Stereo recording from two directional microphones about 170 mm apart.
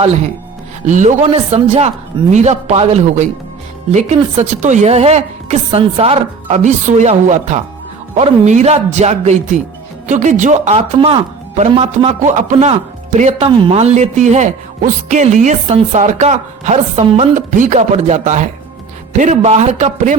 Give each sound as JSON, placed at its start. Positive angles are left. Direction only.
{"t": 0.9, "sound": "a woman's voice", "side_deg": -45}
{"t": 13.4, "sound": "speech", "side_deg": -30}
{"t": 13.7, "sound": "a man's voice", "side_deg": -40}
{"t": 17.3, "sound": "a man's voice", "side_deg": -50}